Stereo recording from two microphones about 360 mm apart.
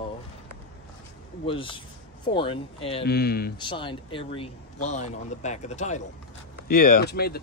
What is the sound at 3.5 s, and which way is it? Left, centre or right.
Speech, centre.